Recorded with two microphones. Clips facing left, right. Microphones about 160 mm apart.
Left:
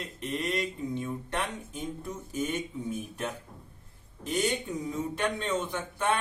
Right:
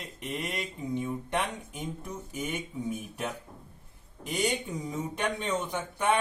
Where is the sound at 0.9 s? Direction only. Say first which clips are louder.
Right 6 dB; 15° right (ahead or behind).